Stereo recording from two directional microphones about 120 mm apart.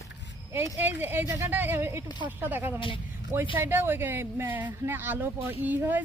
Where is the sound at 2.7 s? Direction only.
45° left (ahead or behind).